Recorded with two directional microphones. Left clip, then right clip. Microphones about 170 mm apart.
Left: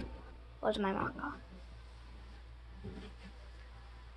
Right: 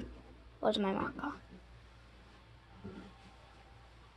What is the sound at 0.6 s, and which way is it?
Speech, 30° right (ahead or behind).